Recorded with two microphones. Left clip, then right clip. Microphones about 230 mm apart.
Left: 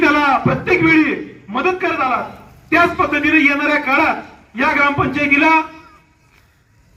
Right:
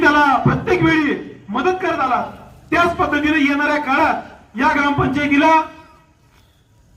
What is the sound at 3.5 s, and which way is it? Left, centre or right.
Speech, right.